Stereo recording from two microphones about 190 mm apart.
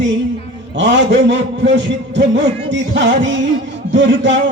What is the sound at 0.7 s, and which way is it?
A man's voice, 70° right (ahead or behind).